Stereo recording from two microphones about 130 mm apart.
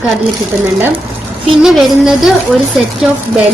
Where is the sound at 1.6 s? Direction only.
5° right (ahead or behind).